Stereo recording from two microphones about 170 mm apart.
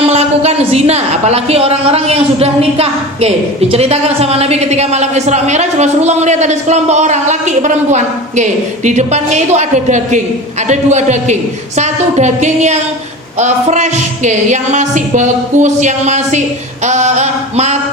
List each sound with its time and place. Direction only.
0.0 s a woman's voice: 40° right (ahead or behind)
10.7 s music: 45° right (ahead or behind)